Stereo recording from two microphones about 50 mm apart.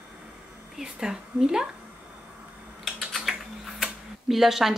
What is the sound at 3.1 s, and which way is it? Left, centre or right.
Typing, centre.